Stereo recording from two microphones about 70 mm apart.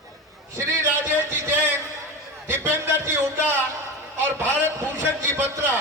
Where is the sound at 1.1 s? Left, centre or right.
Right.